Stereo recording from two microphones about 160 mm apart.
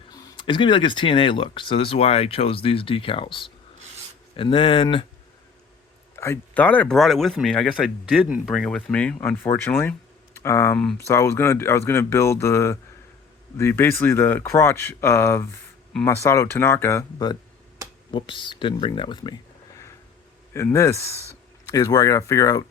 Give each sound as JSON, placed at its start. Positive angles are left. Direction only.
{"t": 0.1, "sound": "speech", "side_deg": 30}
{"t": 6.1, "sound": "speech", "side_deg": 15}
{"t": 18.1, "sound": "speech", "side_deg": 30}
{"t": 20.7, "sound": "speech", "side_deg": 20}